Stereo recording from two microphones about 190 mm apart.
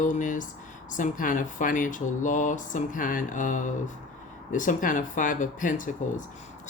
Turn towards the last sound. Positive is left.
turn(degrees=45)  # may be behind; listen again after turning